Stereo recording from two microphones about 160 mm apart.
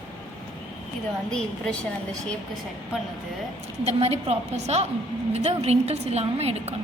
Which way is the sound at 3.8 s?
40° right (ahead or behind).